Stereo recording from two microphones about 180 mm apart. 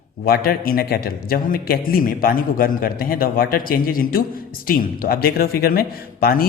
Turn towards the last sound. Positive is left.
turn(degrees=55)  # may be behind; listen again after turning